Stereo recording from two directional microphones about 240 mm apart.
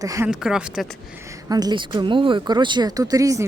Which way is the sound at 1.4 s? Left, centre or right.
Centre.